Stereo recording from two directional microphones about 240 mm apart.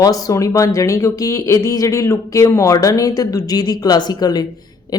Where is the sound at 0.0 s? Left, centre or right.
Centre.